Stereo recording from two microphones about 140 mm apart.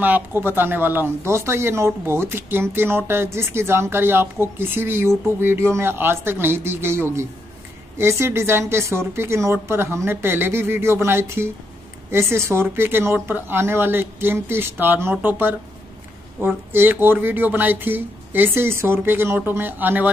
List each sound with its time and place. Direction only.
0.0 s speech: 15° right (ahead or behind)